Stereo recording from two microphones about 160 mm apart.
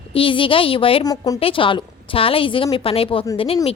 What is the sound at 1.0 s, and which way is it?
A woman's voice, 25° left (ahead or behind).